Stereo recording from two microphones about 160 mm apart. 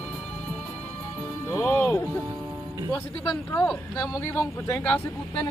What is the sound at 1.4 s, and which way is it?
Music, 15° left (ahead or behind).